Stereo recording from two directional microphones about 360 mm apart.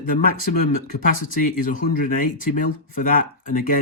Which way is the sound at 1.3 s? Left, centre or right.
Left.